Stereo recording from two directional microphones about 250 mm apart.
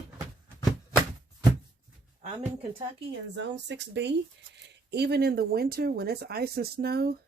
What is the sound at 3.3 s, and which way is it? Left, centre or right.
Speech, right.